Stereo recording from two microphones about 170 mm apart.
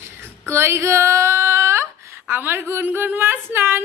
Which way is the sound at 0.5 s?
15° right (ahead or behind).